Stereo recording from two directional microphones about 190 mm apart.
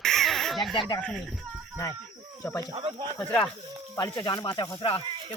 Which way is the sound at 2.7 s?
25° right (ahead or behind).